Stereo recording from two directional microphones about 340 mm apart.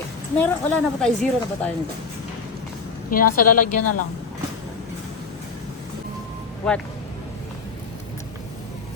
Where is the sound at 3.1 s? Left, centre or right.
Left.